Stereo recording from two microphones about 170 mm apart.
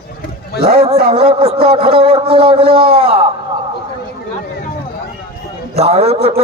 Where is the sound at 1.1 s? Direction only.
35° right (ahead or behind).